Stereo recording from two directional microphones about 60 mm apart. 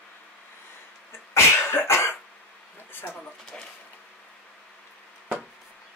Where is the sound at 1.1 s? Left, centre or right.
Left.